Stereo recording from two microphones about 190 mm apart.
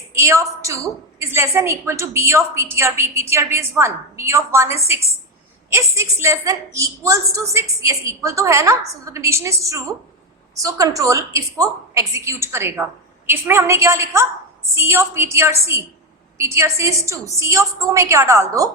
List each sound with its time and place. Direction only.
0.1 s a woman's voice: 15° right (ahead or behind)